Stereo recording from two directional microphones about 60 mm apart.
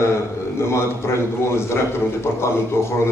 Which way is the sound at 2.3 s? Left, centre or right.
Left.